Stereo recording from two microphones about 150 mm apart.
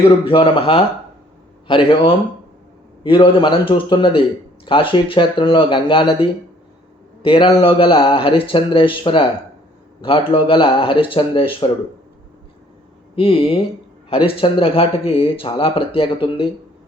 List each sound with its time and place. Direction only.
0.3 s speech: 35° left (ahead or behind)
13.1 s speech: 35° left (ahead or behind)